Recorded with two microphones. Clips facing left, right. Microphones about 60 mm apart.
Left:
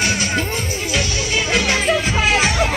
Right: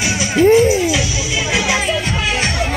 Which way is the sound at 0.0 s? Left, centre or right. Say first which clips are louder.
Right 7 dB; centre.